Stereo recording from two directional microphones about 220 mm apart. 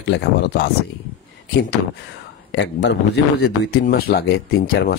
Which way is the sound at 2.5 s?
55° left (ahead or behind).